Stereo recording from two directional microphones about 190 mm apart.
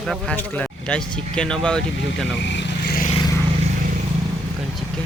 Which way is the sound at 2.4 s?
65° left (ahead or behind).